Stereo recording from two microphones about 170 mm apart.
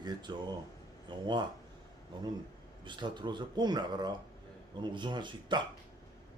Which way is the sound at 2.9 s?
25° right (ahead or behind).